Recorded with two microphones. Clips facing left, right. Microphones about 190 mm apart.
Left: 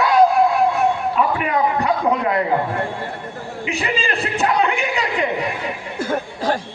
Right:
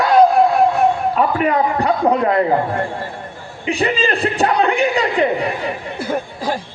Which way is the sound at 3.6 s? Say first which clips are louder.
Right 6 dB; 40° right (ahead or behind).